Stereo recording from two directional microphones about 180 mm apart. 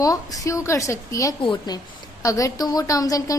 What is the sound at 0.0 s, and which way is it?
A woman's voice, 20° left (ahead or behind).